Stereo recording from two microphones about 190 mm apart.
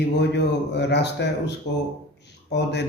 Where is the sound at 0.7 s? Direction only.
65° left (ahead or behind).